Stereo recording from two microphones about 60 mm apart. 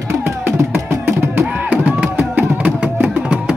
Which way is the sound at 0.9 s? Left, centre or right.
Right.